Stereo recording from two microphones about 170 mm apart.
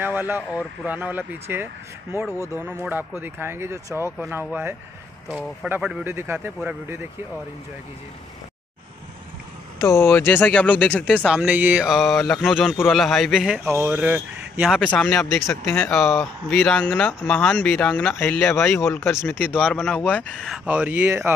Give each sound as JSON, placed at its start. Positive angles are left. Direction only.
{"t": 0.0, "sound": "speech", "side_deg": -10}
{"t": 2.3, "sound": "speech", "side_deg": 15}
{"t": 2.8, "sound": "speech", "side_deg": -10}
{"t": 9.8, "sound": "speech", "side_deg": 15}
{"t": 11.2, "sound": "speech", "side_deg": -5}
{"t": 14.9, "sound": "speech", "side_deg": 10}